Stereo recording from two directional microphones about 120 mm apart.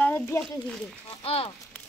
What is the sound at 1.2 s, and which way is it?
Speech, 55° left (ahead or behind).